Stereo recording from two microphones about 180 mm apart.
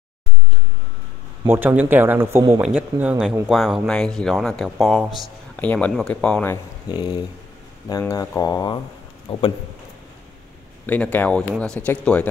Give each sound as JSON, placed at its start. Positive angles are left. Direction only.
{"t": 1.4, "sound": "speech", "side_deg": -10}
{"t": 2.6, "sound": "speech", "side_deg": -5}
{"t": 6.9, "sound": "speech", "side_deg": 20}
{"t": 10.9, "sound": "speech", "side_deg": 10}